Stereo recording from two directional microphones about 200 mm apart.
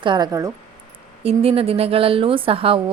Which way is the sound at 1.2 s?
30° right (ahead or behind).